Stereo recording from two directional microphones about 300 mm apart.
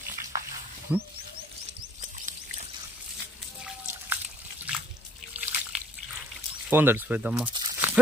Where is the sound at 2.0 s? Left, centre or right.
Right.